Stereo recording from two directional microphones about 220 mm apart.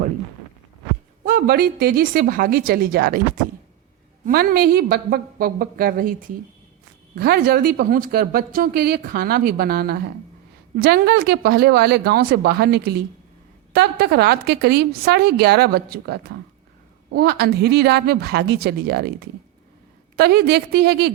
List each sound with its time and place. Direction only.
1.2 s a woman's voice: 40° right (ahead or behind)
4.3 s a woman's voice: 40° right (ahead or behind)